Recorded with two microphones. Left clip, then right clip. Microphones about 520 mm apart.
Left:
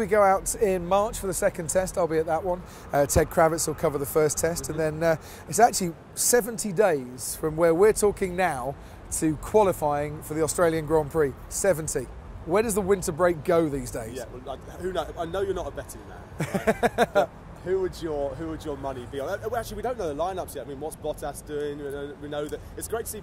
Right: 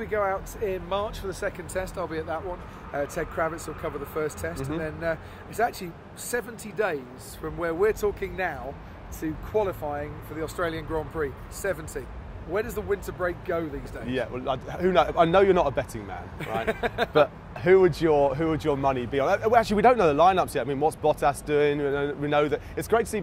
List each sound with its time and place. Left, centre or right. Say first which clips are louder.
0.0 s speech: left 7 dB; left
2.9 s speech: left 7 dB; left
14.1 s a man's voice: right 8 dB; right
16.3 s speech: left 3 dB; left
17.6 s speech: right 9 dB; right